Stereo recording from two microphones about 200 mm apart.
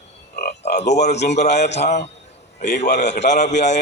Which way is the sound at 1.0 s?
35° left (ahead or behind).